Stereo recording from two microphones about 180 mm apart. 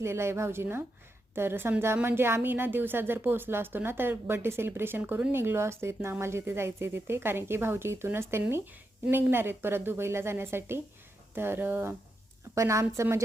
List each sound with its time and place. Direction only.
0.0 s a woman's voice: 15° right (ahead or behind)